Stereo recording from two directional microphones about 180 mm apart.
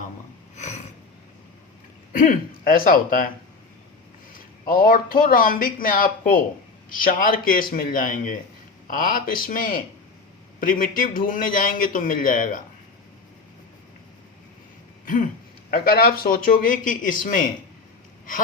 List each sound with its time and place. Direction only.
0.5 s a sound: 40° left (ahead or behind)
2.1 s speech: 50° left (ahead or behind)
4.3 s speech: 55° left (ahead or behind)
15.7 s speech: 55° left (ahead or behind)